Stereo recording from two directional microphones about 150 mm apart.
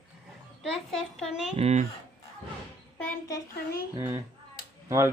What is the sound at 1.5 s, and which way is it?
Speech, 45° right (ahead or behind).